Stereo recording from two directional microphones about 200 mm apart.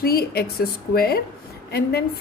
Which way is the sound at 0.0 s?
50° left (ahead or behind).